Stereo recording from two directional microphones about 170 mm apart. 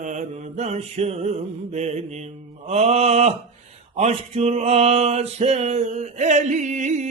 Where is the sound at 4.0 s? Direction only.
40° right (ahead or behind).